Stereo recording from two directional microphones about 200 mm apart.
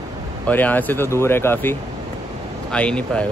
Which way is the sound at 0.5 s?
10° left (ahead or behind).